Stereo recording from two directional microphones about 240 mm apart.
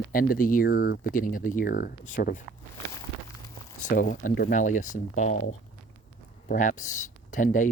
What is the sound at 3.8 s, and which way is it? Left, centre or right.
Speech, left.